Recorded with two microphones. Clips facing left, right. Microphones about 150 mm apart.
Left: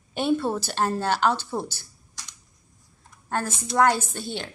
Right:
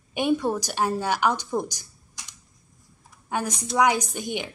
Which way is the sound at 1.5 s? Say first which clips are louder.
Right 3 dB; 15° right (ahead or behind).